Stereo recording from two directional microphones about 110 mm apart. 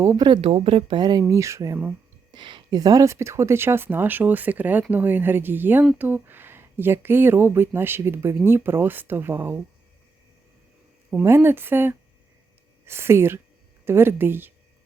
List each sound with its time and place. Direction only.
0.2 s a woman's voice: 50° right (ahead or behind)
1.3 s speech: 25° right (ahead or behind)
2.3 s speech: 45° right (ahead or behind); by 9.6 s 20° right (ahead or behind)
11.1 s speech: 20° right (ahead or behind)